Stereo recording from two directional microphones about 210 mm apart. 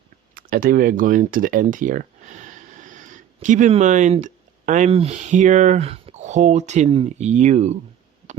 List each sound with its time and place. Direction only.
0.3 s speech: 45° right (ahead or behind)